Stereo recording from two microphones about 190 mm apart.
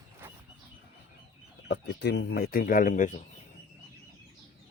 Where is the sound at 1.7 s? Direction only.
60° left (ahead or behind); by 3.2 s 45° left (ahead or behind).